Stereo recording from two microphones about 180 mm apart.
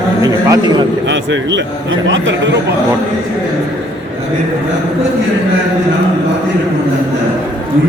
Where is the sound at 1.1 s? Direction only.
90° right.